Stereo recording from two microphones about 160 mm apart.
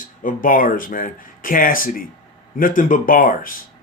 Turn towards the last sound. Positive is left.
turn(degrees=60)  # may be behind; listen again after turning